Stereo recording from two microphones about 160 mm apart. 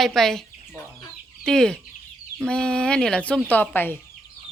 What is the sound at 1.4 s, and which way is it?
A woman's voice, 5° left (ahead or behind).